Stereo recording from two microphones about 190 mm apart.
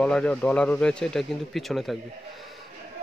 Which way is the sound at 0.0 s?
5° left (ahead or behind).